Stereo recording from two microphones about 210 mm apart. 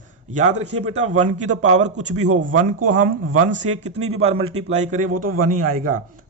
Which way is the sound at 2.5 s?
90° right.